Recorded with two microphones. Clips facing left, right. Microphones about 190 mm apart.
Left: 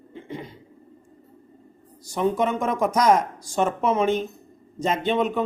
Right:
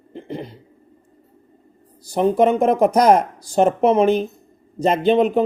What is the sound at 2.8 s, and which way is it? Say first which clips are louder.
Speech: right 3 dB; 60° right (ahead or behind).